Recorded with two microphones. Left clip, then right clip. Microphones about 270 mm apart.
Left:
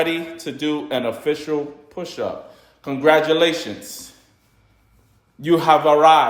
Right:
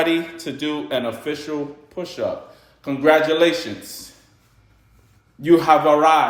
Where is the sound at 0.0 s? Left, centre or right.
Centre.